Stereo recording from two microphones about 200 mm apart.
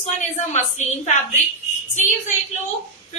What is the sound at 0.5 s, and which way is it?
Speech, 35° left (ahead or behind).